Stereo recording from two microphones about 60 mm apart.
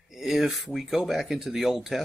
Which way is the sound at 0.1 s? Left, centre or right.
Centre.